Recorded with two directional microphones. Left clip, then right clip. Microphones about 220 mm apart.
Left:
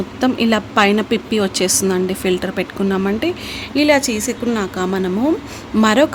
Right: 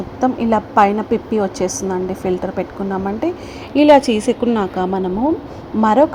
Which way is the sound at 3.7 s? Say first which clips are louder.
Right 4 dB; 5° right (ahead or behind).